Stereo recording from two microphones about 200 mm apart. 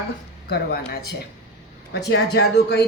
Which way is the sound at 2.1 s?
55° left (ahead or behind).